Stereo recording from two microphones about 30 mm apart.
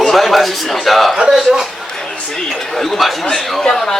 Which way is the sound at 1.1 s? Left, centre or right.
Right.